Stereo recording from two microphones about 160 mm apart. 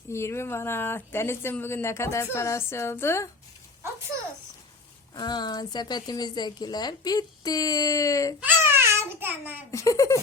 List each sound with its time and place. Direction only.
0.1 s speech: 15° left (ahead or behind)
5.1 s speech: 25° left (ahead or behind)
8.4 s speech: 15° right (ahead or behind)
9.7 s speech: 20° left (ahead or behind)